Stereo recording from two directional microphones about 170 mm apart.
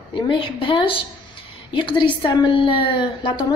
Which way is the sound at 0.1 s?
30° left (ahead or behind).